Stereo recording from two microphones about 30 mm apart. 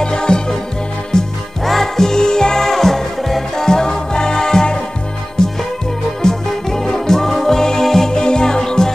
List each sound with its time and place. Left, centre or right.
0.0 s music: left
1.6 s music: centre
2.7 s music: centre
3.6 s music: left
8.1 s music: left